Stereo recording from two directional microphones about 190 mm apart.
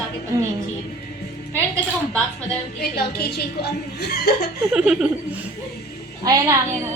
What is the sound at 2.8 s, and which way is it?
A woman's voice, 55° left (ahead or behind).